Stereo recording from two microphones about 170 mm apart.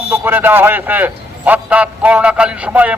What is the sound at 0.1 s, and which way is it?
A man's voice, 10° right (ahead or behind).